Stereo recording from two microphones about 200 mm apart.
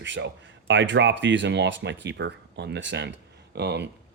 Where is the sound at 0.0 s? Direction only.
65° right (ahead or behind).